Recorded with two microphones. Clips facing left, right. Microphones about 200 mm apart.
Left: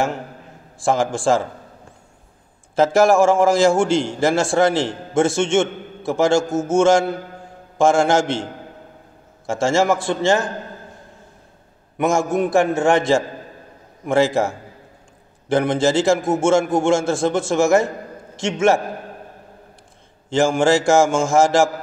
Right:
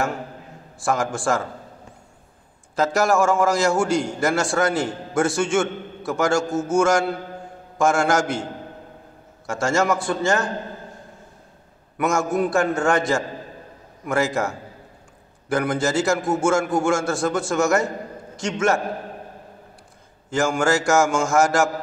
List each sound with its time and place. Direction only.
0.8 s a man's voice: 30° left (ahead or behind)
2.7 s a man's voice: 25° left (ahead or behind)
9.5 s a man's voice: 25° left (ahead or behind)
12.0 s a man's voice: 25° left (ahead or behind)
20.2 s a man's voice: 30° left (ahead or behind)